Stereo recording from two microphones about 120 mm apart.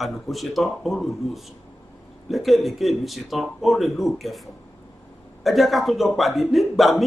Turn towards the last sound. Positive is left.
turn(degrees=0)  # may be behind; listen again after turning